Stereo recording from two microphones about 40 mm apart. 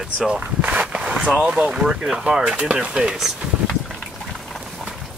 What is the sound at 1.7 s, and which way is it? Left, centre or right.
Speech, centre.